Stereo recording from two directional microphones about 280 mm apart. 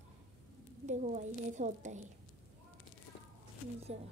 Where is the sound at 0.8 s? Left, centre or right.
Right.